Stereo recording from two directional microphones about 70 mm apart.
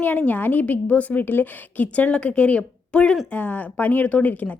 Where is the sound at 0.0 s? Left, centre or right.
Left.